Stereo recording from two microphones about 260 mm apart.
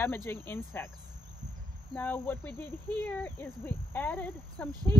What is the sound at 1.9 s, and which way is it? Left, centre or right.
Speech, centre.